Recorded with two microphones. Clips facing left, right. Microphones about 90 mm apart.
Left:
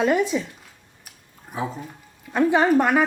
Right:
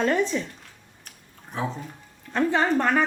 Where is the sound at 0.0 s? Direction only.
10° left (ahead or behind).